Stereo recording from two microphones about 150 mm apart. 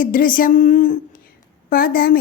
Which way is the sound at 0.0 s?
65° left (ahead or behind).